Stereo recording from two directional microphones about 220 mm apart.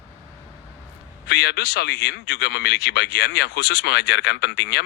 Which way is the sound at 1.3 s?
50° left (ahead or behind).